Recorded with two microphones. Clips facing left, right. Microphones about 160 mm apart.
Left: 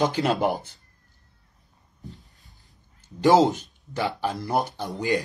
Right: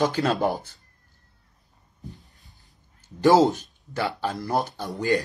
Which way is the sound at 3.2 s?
15° left (ahead or behind).